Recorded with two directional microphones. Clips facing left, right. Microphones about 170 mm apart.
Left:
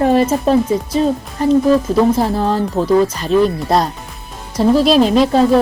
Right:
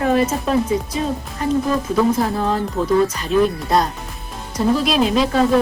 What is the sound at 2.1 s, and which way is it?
Speech, 35° left (ahead or behind).